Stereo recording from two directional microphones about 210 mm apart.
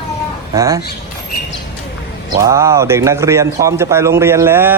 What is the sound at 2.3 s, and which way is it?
A man's voice, 15° right (ahead or behind).